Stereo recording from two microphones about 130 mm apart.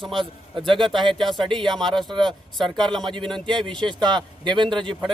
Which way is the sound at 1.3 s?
40° right (ahead or behind).